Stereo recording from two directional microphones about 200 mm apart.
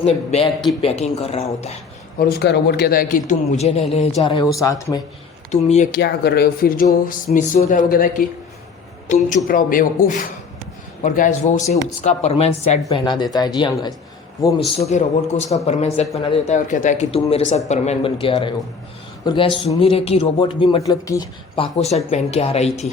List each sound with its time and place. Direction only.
0.0 s a man's voice: 30° left (ahead or behind)
2.1 s a man's voice: 55° left (ahead or behind); by 3.8 s 35° left (ahead or behind)
4.2 s a man's voice: 25° left (ahead or behind)
5.5 s speech: 35° left (ahead or behind)
6.0 s a man's voice: 55° left (ahead or behind); by 14.6 s 20° left (ahead or behind)
14.8 s a man's voice: 35° left (ahead or behind)
21.5 s speech: 30° left (ahead or behind)